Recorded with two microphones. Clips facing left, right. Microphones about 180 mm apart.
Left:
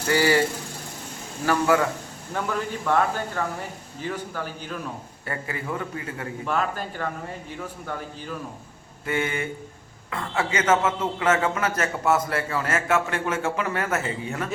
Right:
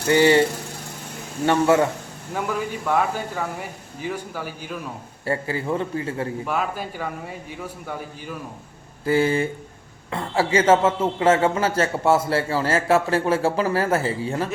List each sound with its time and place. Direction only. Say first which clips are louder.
0.1 s a man's voice: right 5 dB; 25° right (ahead or behind)
1.5 s a man's voice: right 4 dB; 25° right (ahead or behind)
2.3 s speech: right 2 dB; 10° right (ahead or behind)
5.2 s a man's voice: right 7 dB; 30° right (ahead or behind)
6.4 s speech: right 1 dB; 10° right (ahead or behind)
9.0 s a man's voice: right 7 dB; 35° right (ahead or behind)